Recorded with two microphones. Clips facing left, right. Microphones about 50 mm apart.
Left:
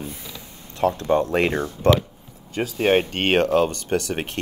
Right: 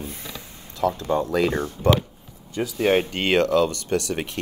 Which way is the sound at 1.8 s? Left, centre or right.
Left.